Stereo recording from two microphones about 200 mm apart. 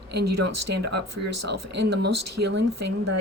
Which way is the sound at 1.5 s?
55° right (ahead or behind).